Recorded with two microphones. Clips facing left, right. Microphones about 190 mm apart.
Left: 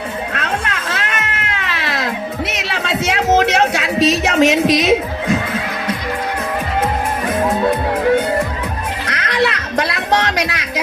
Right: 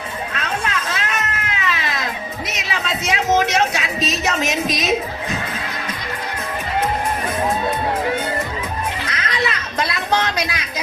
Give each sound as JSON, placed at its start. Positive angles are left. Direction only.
{"t": 0.3, "sound": "cat", "side_deg": 65}
{"t": 2.6, "sound": "music", "side_deg": 70}
{"t": 9.0, "sound": "music", "side_deg": 70}